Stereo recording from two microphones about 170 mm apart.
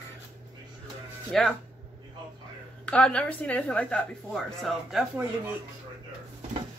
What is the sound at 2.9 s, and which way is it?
A woman's voice, 5° left (ahead or behind).